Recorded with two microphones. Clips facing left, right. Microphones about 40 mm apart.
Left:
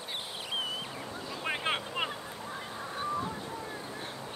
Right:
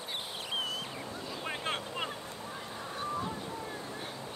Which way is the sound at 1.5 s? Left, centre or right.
Left.